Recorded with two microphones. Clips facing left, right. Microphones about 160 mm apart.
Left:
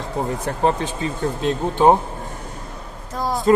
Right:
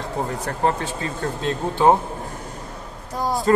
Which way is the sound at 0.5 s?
20° left (ahead or behind).